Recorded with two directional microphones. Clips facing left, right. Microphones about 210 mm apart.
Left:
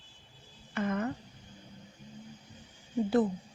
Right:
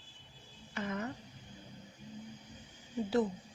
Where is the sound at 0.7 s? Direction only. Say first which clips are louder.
Left 6 dB; 55° left (ahead or behind).